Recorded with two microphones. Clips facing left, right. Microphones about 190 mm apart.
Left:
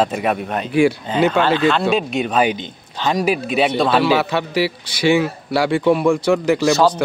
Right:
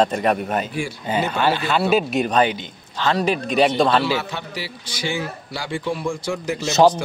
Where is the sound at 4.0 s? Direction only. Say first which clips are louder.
Left 7 dB; 65° left (ahead or behind).